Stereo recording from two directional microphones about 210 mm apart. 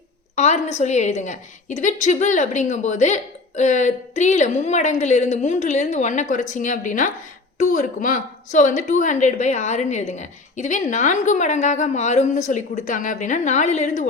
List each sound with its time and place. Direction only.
0.3 s a woman's voice: 35° left (ahead or behind)